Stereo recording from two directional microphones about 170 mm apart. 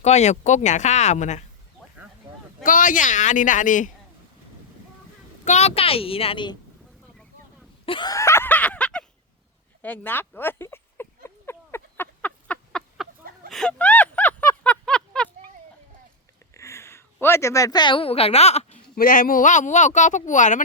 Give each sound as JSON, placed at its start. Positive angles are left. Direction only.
{"t": 0.0, "sound": "speech", "side_deg": 40}
{"t": 2.6, "sound": "speech", "side_deg": 50}
{"t": 5.5, "sound": "a woman's voice", "side_deg": 40}
{"t": 7.9, "sound": "a sound", "side_deg": 25}
{"t": 16.6, "sound": "speech", "side_deg": 15}
{"t": 18.9, "sound": "speech", "side_deg": 55}